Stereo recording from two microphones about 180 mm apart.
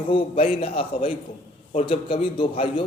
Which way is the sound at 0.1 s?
30° left (ahead or behind).